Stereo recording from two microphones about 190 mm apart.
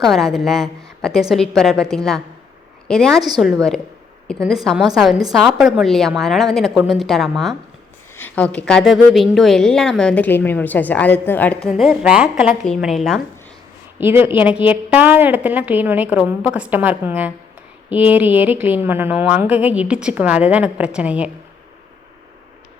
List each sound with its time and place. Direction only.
0.0 s a woman's voice: centre (ahead or behind)
11.7 s a woman's voice: 5° right (ahead or behind)
14.0 s speech: 10° right (ahead or behind)